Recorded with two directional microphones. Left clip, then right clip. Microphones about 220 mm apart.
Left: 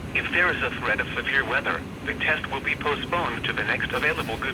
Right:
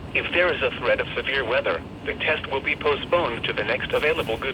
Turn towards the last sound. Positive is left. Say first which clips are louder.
# right 2 dB
turn(degrees=-30)  # may be behind; listen again after turning